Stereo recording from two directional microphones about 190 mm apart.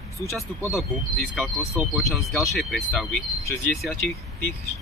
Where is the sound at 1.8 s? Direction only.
Centre (ahead or behind).